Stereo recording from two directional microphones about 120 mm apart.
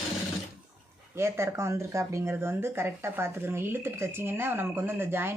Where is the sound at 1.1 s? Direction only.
25° right (ahead or behind).